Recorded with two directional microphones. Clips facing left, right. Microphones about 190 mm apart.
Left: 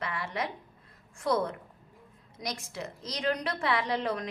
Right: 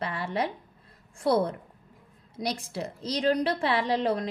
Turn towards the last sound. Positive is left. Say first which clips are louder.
# right 5 dB
turn(degrees=-30)  # may be behind; listen again after turning